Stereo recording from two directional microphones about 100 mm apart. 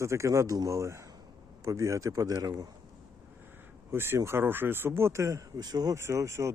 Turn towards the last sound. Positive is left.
turn(degrees=-30)  # may be behind; listen again after turning